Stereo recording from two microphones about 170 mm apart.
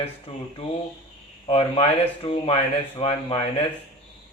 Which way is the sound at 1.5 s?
35° left (ahead or behind).